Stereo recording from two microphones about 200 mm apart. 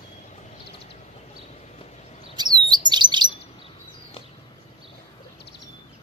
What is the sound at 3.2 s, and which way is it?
Chirp, 25° left (ahead or behind).